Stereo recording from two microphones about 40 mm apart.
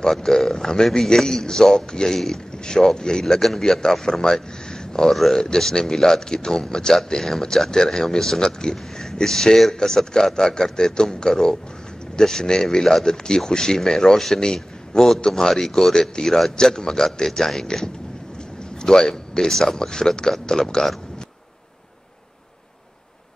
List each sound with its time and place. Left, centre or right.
0.0 s speech: centre
5.1 s speech: centre
5.4 s a man's voice: centre